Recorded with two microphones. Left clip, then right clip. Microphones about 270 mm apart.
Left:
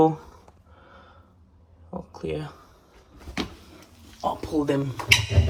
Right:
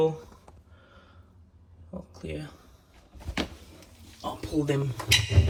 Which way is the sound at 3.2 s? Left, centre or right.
Centre.